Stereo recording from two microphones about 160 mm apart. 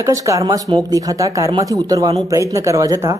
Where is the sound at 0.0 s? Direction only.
20° right (ahead or behind).